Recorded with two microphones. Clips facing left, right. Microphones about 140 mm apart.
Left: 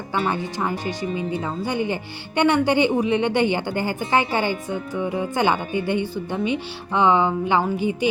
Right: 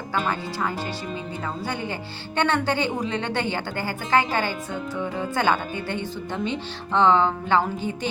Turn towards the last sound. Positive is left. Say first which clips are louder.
# left 2 dB
turn(degrees=15)  # may be behind; listen again after turning